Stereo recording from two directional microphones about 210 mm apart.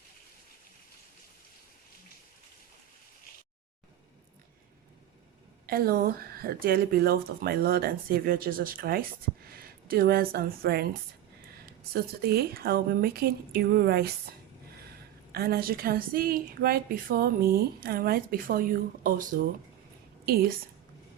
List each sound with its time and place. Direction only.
5.6 s speech: 45° right (ahead or behind)
15.3 s speech: 50° right (ahead or behind)